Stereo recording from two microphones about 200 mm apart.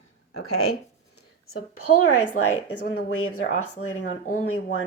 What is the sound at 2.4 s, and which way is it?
Speech, 90° left.